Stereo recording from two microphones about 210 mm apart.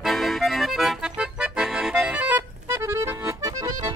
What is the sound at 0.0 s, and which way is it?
Accordion, centre (ahead or behind).